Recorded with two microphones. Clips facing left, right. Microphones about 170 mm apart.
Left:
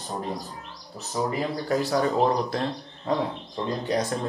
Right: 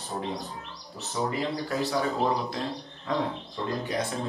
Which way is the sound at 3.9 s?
40° left (ahead or behind).